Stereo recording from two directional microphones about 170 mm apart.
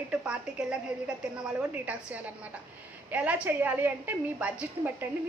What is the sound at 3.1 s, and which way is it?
Speech, 10° right (ahead or behind).